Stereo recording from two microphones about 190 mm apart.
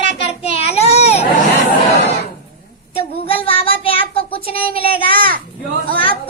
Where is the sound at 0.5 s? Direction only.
30° left (ahead or behind).